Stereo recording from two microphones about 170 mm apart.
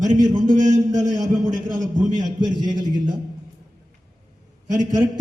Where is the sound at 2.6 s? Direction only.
25° right (ahead or behind).